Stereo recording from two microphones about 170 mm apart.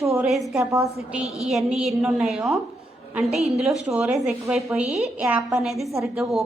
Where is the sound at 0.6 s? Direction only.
20° right (ahead or behind).